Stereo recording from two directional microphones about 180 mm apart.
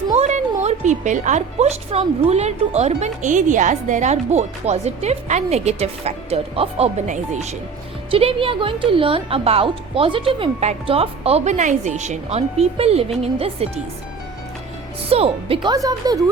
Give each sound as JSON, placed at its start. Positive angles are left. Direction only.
{"t": 0.2, "sound": "a woman's voice", "side_deg": -40}
{"t": 15.1, "sound": "speech", "side_deg": -30}